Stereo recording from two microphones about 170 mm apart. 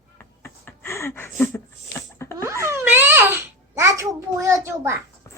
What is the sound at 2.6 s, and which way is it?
Babbling, 10° right (ahead or behind).